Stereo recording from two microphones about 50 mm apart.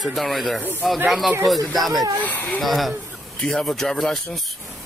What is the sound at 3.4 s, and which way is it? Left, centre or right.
Speech, centre.